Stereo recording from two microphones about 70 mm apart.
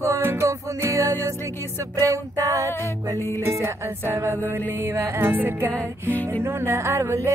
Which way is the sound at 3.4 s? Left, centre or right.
Right.